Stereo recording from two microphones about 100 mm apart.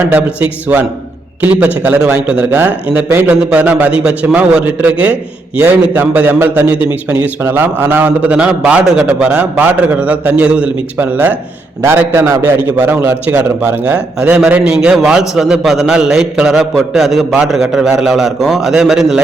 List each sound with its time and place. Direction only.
0.1 s a man's voice: 15° right (ahead or behind)
12.4 s a man's voice: 15° right (ahead or behind)